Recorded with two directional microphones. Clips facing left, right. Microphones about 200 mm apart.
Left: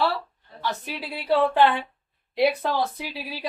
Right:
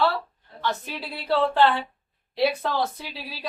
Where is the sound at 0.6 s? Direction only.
15° left (ahead or behind).